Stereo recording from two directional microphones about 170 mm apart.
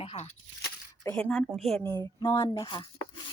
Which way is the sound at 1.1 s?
5° left (ahead or behind).